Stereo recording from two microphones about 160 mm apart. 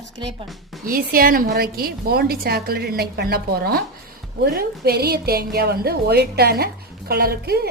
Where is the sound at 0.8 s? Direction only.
65° right (ahead or behind).